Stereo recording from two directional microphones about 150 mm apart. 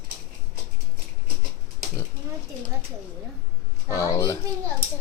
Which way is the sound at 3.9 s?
20° left (ahead or behind).